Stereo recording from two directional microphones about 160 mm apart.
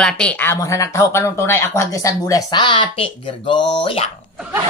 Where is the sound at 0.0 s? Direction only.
5° left (ahead or behind); by 4.1 s 35° left (ahead or behind).